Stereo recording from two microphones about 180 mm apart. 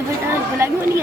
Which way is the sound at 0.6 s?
15° right (ahead or behind).